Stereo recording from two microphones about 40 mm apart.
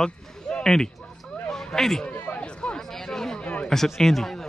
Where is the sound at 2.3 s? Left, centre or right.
Left.